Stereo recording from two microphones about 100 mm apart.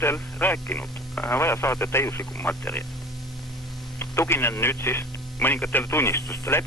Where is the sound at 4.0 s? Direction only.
25° left (ahead or behind).